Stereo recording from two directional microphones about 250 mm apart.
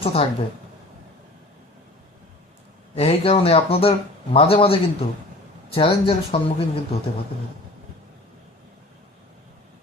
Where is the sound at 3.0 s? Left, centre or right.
Left.